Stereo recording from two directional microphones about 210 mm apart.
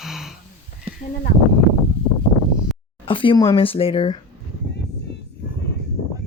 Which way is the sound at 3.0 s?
25° left (ahead or behind).